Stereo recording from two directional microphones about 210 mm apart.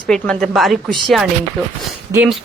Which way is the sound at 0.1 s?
5° left (ahead or behind).